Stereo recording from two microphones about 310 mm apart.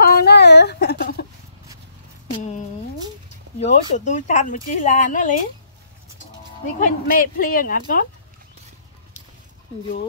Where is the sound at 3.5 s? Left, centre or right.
Left.